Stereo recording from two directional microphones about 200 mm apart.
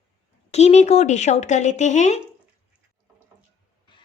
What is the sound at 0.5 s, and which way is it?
Speech, 35° left (ahead or behind).